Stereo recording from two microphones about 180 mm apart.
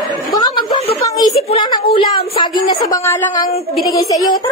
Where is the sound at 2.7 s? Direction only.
20° left (ahead or behind).